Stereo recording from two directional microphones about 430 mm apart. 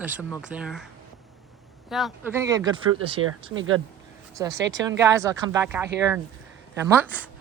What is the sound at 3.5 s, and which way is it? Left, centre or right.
Speech, right.